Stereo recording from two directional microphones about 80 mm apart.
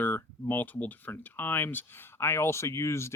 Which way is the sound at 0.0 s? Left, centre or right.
Left.